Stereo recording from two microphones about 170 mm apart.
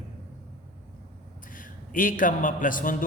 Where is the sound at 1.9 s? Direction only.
50° left (ahead or behind).